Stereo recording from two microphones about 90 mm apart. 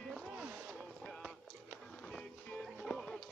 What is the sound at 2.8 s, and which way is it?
Music, 5° left (ahead or behind).